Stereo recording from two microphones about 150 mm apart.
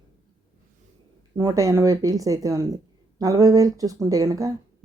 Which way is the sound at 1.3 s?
20° right (ahead or behind).